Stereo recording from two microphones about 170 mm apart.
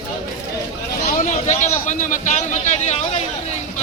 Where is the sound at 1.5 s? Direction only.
45° left (ahead or behind).